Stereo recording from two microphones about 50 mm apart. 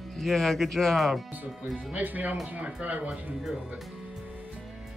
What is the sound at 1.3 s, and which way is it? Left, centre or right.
Speech, right.